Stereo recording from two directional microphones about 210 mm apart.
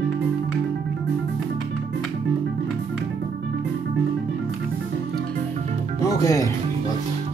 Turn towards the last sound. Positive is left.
turn(degrees=15)  # may be behind; listen again after turning